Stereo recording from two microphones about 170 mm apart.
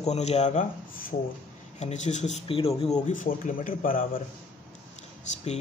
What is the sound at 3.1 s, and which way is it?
Speech, 50° left (ahead or behind).